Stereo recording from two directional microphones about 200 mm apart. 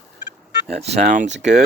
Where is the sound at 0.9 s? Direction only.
35° right (ahead or behind).